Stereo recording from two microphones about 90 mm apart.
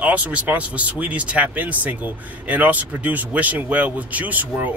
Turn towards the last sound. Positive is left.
turn(degrees=-20)  # may be behind; listen again after turning